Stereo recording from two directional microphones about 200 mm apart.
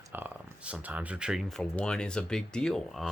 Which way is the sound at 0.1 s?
10° right (ahead or behind).